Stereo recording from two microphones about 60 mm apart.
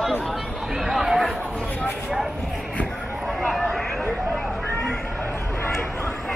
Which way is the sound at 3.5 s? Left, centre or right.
Centre.